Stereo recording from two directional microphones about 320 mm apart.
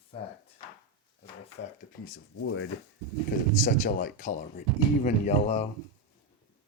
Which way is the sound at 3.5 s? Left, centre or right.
Left.